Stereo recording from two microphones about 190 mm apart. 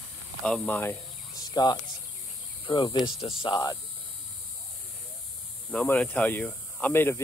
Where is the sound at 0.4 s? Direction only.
5° left (ahead or behind); by 3.7 s 25° left (ahead or behind).